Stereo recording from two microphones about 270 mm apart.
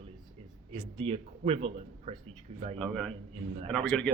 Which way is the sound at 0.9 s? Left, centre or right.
Right.